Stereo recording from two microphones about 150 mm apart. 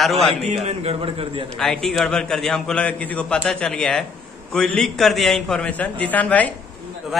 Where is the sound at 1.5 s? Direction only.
5° left (ahead or behind).